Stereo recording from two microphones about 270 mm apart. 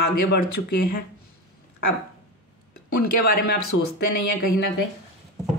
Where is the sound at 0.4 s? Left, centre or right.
Left.